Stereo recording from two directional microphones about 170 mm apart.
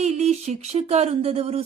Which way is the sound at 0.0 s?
40° right (ahead or behind).